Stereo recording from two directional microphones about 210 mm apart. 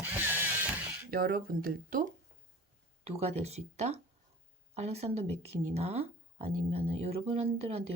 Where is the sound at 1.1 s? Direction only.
45° right (ahead or behind).